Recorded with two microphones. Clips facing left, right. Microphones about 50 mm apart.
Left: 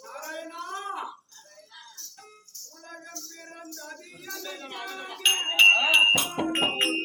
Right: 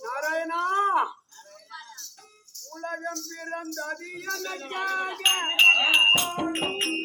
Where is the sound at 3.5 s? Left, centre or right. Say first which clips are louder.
Right 10 dB; right.